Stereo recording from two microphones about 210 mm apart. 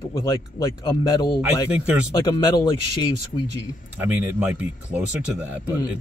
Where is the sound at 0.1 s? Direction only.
15° left (ahead or behind).